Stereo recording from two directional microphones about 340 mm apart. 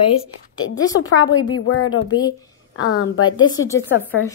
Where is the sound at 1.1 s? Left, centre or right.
Left.